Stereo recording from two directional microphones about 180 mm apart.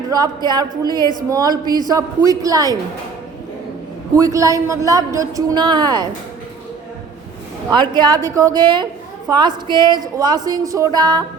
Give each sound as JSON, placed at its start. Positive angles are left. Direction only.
{"t": 0.1, "sound": "a man's voice", "side_deg": -20}
{"t": 4.1, "sound": "a man's voice", "side_deg": -20}
{"t": 7.7, "sound": "a man's voice", "side_deg": -25}